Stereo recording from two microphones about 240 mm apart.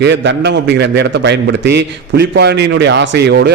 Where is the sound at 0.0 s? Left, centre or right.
Right.